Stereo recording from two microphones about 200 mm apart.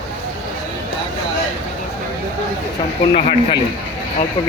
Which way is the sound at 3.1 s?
35° left (ahead or behind).